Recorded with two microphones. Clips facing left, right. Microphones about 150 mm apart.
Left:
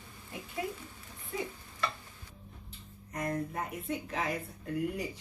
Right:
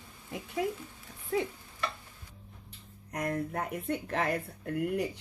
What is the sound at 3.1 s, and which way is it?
Speech, 65° right (ahead or behind).